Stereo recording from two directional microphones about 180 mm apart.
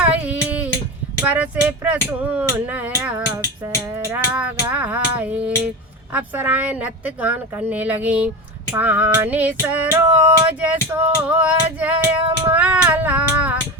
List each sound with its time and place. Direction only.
0.0 s child singing: 10° right (ahead or behind)
1.2 s female singing: 10° right (ahead or behind)